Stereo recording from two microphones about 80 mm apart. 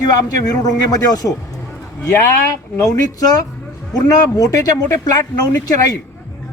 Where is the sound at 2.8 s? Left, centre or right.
Left.